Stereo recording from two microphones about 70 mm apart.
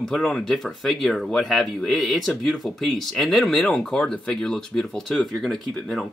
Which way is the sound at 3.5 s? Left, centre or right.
Centre.